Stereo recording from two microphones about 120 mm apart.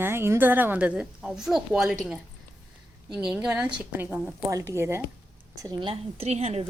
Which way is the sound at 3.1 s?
5° right (ahead or behind).